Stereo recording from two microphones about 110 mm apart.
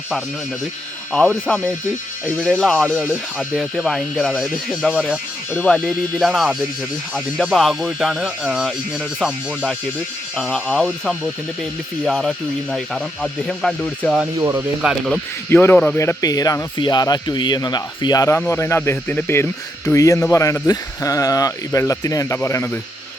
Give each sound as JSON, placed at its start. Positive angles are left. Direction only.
{"t": 1.1, "sound": "speech", "side_deg": 10}
{"t": 2.9, "sound": "speech", "side_deg": -5}
{"t": 5.5, "sound": "speech", "side_deg": 20}
{"t": 5.7, "sound": "speech", "side_deg": 5}
{"t": 10.3, "sound": "speech", "side_deg": 10}
{"t": 14.3, "sound": "speech", "side_deg": -30}
{"t": 14.8, "sound": "speech", "side_deg": -5}
{"t": 15.4, "sound": "speech", "side_deg": 15}
{"t": 16.0, "sound": "speech", "side_deg": 30}